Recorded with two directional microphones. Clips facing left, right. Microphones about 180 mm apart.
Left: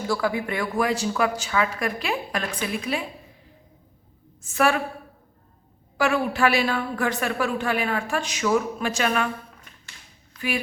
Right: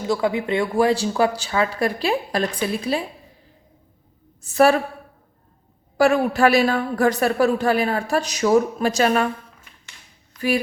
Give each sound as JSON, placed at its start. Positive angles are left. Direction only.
{"t": 0.1, "sound": "a woman's voice", "side_deg": -20}
{"t": 4.4, "sound": "a woman's voice", "side_deg": -35}
{"t": 6.0, "sound": "a woman's voice", "side_deg": -45}